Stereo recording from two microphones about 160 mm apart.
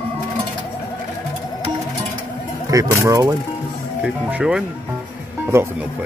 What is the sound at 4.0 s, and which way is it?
Speech, 5° right (ahead or behind).